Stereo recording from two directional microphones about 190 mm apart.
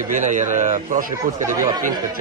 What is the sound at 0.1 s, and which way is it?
Speech, 40° right (ahead or behind).